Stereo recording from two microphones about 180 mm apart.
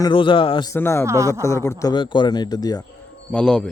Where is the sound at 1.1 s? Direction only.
15° right (ahead or behind).